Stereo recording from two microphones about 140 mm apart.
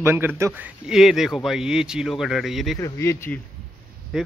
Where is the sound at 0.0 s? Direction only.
15° right (ahead or behind); by 2.8 s centre (ahead or behind).